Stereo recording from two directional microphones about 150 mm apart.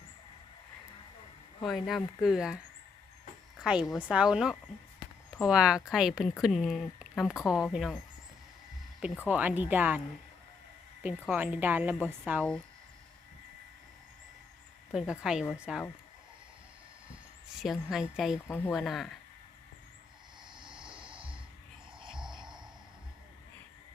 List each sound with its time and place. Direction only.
1.6 s a woman's voice: centre (ahead or behind)
3.6 s a woman's voice: 5° right (ahead or behind)
9.2 s speech: 10° right (ahead or behind)
11.0 s speech: 10° right (ahead or behind)
12.4 s a woman's voice: 5° left (ahead or behind)
14.9 s a woman's voice: 5° right (ahead or behind)
17.5 s a woman's voice: 5° right (ahead or behind)
20.6 s a sound: 30° right (ahead or behind)
22.1 s cricket: 5° right (ahead or behind)